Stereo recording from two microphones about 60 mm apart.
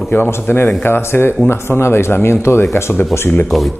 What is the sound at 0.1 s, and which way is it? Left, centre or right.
Speech, left.